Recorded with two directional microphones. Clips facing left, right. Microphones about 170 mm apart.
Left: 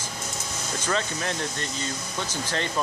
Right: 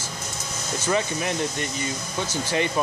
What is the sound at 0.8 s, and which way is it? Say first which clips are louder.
Speech: right 4 dB; 10° right (ahead or behind).